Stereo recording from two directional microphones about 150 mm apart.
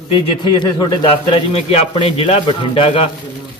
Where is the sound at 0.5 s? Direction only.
30° left (ahead or behind).